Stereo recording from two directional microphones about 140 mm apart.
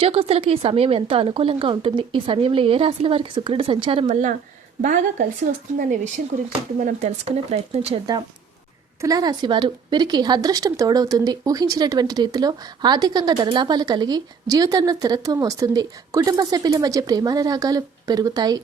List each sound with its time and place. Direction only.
0.0 s a woman's voice: 45° right (ahead or behind)
4.0 s speech: 60° right (ahead or behind)
7.3 s speech: 50° right (ahead or behind)
9.0 s speech: 25° right (ahead or behind)